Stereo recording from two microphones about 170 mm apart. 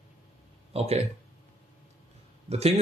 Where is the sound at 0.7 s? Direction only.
40° right (ahead or behind).